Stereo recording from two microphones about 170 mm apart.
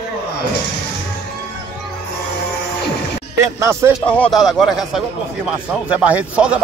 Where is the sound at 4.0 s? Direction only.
5° left (ahead or behind).